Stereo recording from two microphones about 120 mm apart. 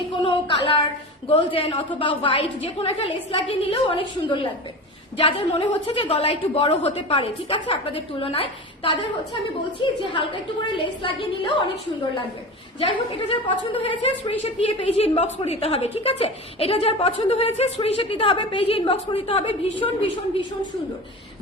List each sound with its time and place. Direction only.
0.2 s a sound: 45° left (ahead or behind)
1.4 s a woman's voice: 45° left (ahead or behind)
12.8 s a woman's voice: 50° left (ahead or behind)